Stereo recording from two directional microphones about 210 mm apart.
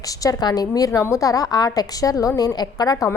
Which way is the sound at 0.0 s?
15° left (ahead or behind).